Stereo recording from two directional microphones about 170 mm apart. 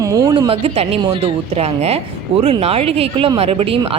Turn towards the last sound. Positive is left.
turn(degrees=-35)  # may be behind; listen again after turning